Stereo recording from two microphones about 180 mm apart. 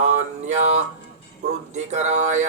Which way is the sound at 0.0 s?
40° right (ahead or behind).